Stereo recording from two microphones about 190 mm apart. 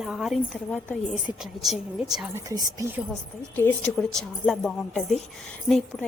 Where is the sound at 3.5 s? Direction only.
5° left (ahead or behind).